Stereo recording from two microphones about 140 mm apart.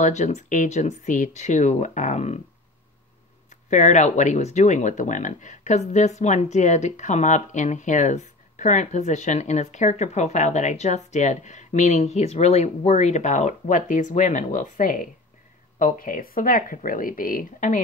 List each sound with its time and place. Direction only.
0.0 s speech: 55° left (ahead or behind)
3.7 s speech: 60° left (ahead or behind)